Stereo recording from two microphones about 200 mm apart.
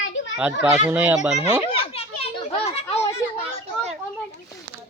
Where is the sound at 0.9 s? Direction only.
10° right (ahead or behind).